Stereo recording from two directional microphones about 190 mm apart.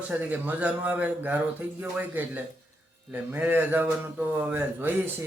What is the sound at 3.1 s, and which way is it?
Speech, 10° right (ahead or behind).